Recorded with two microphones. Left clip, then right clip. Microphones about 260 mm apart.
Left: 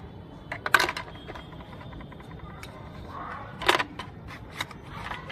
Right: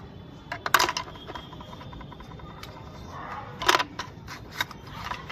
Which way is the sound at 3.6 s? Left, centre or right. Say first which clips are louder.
Right 1 dB; centre.